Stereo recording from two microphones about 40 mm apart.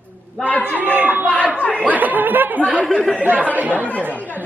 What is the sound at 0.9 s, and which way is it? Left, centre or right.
Speech, right.